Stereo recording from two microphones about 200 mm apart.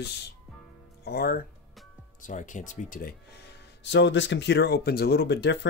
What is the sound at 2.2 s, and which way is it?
Speech, 40° left (ahead or behind).